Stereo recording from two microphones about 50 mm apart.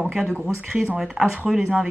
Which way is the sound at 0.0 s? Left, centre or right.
Centre.